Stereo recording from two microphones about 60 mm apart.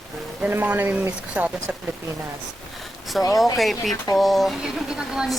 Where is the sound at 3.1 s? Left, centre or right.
Centre.